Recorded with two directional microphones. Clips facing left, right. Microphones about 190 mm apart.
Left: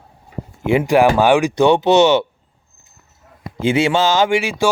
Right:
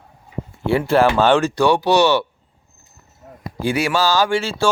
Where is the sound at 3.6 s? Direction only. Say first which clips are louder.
Left 3 dB; 25° left (ahead or behind).